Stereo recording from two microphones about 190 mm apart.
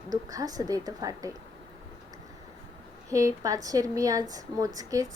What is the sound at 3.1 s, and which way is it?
A woman's voice, 15° right (ahead or behind).